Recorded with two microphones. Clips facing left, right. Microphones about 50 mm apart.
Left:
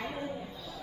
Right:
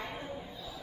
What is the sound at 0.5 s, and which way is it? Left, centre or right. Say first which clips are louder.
Music: left 1 dB; centre.